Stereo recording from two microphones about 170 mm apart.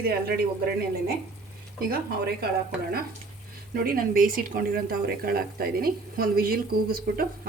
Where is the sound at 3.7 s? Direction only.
60° right (ahead or behind).